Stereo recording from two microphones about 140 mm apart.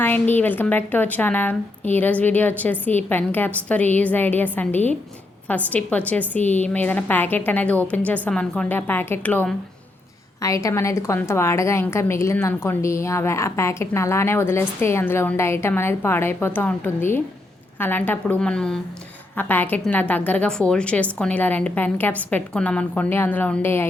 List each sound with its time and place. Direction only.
0.0 s a woman's voice: 15° left (ahead or behind)
10.4 s a woman's voice: 25° left (ahead or behind)